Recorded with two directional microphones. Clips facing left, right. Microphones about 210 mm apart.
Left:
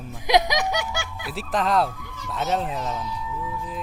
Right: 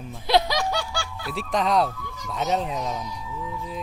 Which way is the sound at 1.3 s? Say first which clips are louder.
Even; centre (ahead or behind).